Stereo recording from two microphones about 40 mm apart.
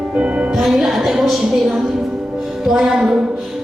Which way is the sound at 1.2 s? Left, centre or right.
Centre.